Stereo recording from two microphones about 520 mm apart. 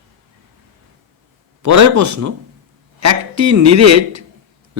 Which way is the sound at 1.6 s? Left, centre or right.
Right.